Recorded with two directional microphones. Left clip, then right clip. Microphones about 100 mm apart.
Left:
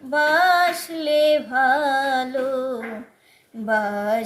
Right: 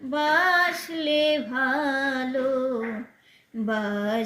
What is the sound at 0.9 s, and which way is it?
Child singing, 40° left (ahead or behind).